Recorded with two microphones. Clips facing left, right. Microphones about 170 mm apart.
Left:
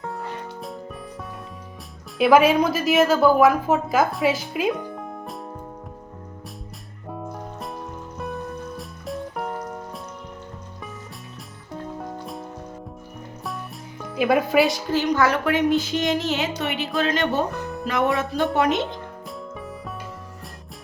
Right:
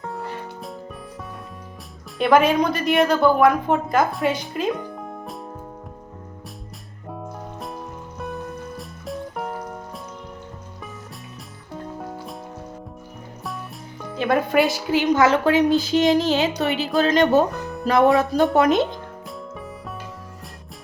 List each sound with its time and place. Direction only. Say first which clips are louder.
2.1 s a woman's voice: left 1 dB; 5° left (ahead or behind)
7.1 s music: left 1 dB; centre (ahead or behind)
11.7 s music: even; centre (ahead or behind)
14.2 s a woman's voice: left 1 dB; 5° left (ahead or behind)
14.9 s a woman's voice: right 4 dB; 20° right (ahead or behind); by 18.8 s 40° right (ahead or behind)